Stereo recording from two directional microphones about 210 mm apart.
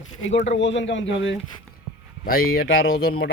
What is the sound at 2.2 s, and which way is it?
Speech, 45° left (ahead or behind).